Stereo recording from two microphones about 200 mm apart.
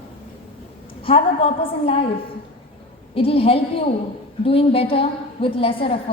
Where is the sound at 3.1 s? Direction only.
30° left (ahead or behind).